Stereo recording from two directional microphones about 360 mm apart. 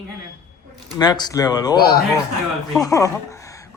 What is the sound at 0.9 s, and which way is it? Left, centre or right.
A man's voice, centre.